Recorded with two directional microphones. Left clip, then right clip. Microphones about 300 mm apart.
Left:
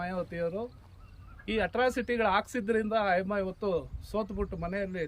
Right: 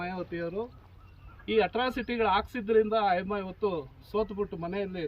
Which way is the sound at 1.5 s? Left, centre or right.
Left.